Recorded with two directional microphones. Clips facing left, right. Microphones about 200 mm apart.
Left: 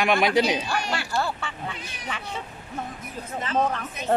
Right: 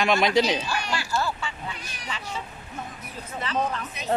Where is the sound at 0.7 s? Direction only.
55° left (ahead or behind).